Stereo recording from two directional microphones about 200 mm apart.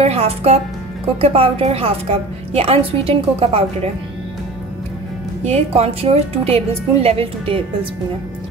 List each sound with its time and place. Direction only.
0.0 s a woman's voice: 30° right (ahead or behind)
5.4 s a woman's voice: 30° right (ahead or behind)